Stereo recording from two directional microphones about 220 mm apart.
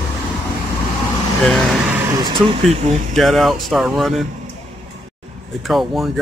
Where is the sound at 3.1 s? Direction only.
Centre (ahead or behind).